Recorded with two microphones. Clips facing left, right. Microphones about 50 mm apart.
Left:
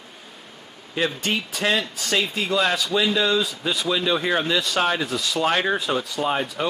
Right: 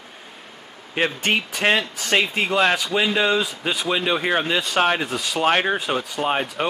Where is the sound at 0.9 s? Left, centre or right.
Right.